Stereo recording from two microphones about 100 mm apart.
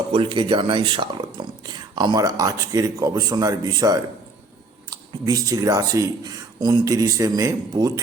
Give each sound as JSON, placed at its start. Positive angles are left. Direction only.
{"t": 0.1, "sound": "speech", "side_deg": -60}